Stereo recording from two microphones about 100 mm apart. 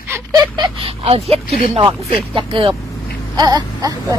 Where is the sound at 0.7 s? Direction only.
70° right (ahead or behind).